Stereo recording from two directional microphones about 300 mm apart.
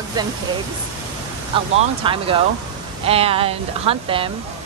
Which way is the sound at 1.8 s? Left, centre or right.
Centre.